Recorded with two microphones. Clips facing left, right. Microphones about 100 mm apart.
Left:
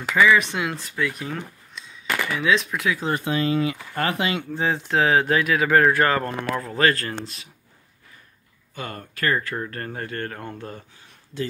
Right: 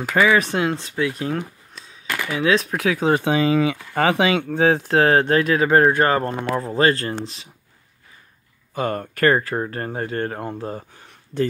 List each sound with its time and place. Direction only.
0.1 s speech: 45° right (ahead or behind)
0.7 s speech: 25° right (ahead or behind)
2.0 s a sound: centre (ahead or behind)
2.4 s speech: 40° right (ahead or behind)
3.9 s speech: 80° right
4.7 s speech: 40° right (ahead or behind)
8.7 s speech: 45° right (ahead or behind)
9.3 s speech: 35° right (ahead or behind)